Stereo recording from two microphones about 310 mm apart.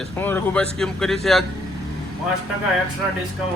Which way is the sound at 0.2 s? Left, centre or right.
Centre.